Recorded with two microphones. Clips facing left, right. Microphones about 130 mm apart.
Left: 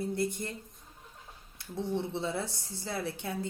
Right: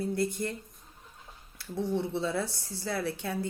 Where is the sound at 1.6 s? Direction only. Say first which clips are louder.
Right 4 dB; 20° left (ahead or behind).